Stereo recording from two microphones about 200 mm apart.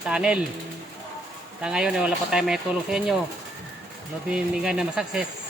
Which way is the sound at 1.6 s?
5° right (ahead or behind).